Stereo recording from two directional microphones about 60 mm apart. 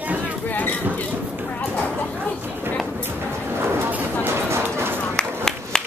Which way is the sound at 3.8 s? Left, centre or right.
Right.